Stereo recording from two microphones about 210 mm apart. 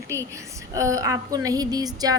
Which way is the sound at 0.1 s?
15° right (ahead or behind).